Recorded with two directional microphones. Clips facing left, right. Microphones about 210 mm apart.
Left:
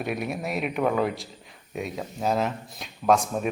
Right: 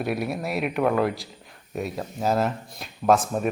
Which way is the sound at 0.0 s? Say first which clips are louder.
Right 2 dB; centre (ahead or behind).